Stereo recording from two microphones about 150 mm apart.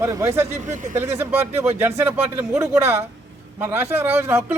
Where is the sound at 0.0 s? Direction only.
20° right (ahead or behind).